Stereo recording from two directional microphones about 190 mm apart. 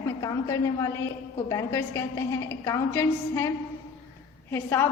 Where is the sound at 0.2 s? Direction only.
15° left (ahead or behind).